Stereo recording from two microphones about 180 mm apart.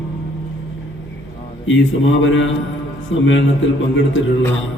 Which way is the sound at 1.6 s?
90° left.